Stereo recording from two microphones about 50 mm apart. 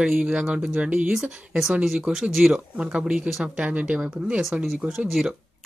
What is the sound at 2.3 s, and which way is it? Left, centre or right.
Speech, centre.